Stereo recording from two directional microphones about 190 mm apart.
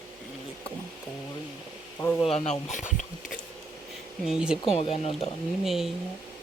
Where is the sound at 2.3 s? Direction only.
35° left (ahead or behind).